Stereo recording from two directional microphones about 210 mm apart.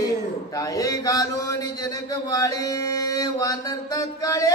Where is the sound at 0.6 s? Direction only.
15° left (ahead or behind).